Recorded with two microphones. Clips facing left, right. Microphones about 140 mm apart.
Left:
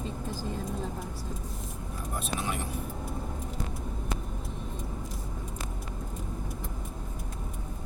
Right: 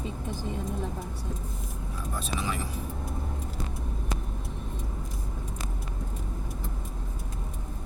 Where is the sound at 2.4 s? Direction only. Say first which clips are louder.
Right 2 dB; 90° right.